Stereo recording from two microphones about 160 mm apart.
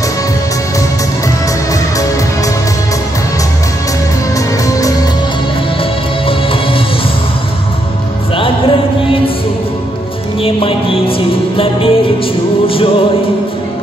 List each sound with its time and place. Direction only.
1.7 s music: 20° left (ahead or behind)
4.6 s music: 20° left (ahead or behind)
5.8 s music: 35° left (ahead or behind)
8.4 s music: 35° left (ahead or behind)
10.4 s music: 35° left (ahead or behind)